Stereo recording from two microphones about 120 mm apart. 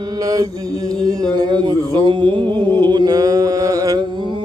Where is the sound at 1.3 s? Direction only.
40° right (ahead or behind).